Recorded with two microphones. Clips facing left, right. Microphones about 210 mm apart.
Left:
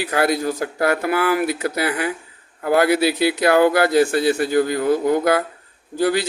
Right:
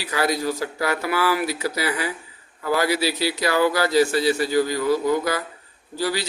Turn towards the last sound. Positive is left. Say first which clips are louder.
# left 6 dB
turn(degrees=55)  # may be behind; listen again after turning